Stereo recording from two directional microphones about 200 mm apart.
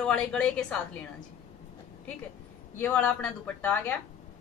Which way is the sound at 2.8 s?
10° left (ahead or behind).